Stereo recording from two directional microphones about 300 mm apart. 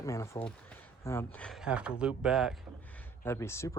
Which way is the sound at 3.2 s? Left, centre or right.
Centre.